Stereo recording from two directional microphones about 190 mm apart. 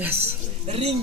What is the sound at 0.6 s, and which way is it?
Speech, 35° right (ahead or behind).